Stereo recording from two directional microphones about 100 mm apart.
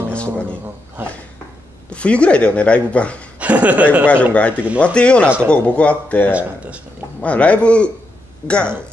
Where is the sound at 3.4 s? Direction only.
15° right (ahead or behind).